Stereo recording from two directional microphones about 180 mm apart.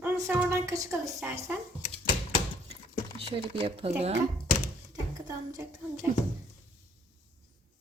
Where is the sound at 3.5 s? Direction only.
30° right (ahead or behind).